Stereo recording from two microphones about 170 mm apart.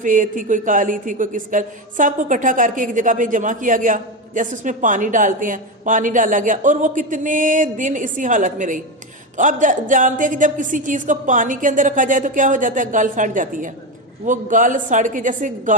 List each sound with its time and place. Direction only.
0.0 s speech: 50° right (ahead or behind)